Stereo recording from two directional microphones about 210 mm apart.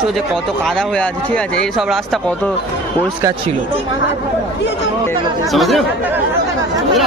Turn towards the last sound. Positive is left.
turn(degrees=0)  # may be behind; listen again after turning